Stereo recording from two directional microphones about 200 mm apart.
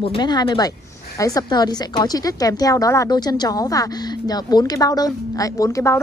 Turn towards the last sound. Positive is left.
turn(degrees=15)  # may be behind; listen again after turning